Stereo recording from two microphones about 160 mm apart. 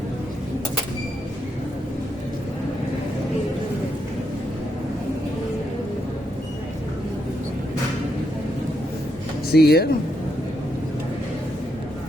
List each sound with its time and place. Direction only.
9.5 s speech: 75° left (ahead or behind)